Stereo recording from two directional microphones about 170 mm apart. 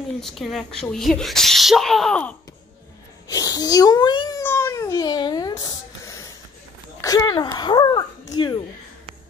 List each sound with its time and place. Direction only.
0.2 s speech: centre (ahead or behind)
3.3 s speech: 20° left (ahead or behind)
4.4 s cat: 15° left (ahead or behind)
7.0 s speech: 20° left (ahead or behind)